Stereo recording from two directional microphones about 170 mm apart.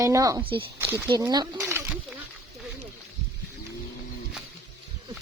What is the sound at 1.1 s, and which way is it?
Speech, 25° right (ahead or behind).